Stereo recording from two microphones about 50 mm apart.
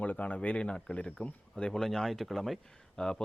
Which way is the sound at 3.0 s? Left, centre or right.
Centre.